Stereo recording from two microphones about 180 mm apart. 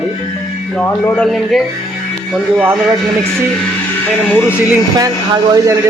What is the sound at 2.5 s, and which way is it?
Speech, 10° right (ahead or behind).